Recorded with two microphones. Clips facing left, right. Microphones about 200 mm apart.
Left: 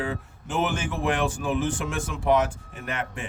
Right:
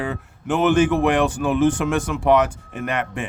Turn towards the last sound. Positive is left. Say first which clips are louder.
# right 7 dB
turn(degrees=-75)  # may be behind; listen again after turning